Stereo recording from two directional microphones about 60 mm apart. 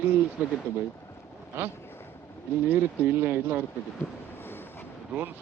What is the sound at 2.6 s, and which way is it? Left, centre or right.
Speech, right.